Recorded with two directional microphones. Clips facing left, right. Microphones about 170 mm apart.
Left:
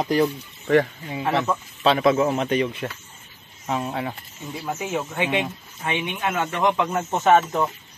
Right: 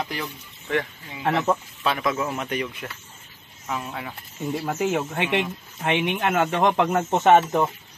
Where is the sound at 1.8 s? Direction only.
25° left (ahead or behind).